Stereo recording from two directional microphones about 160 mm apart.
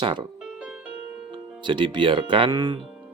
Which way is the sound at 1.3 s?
30° right (ahead or behind).